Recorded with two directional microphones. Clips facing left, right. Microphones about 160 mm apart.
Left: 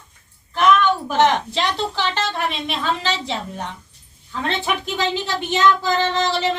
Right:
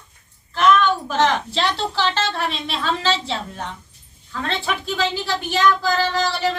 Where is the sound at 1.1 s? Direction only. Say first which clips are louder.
Left 2 dB; 15° left (ahead or behind).